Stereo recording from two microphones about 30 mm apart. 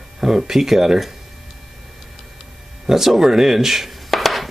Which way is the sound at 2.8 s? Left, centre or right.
Centre.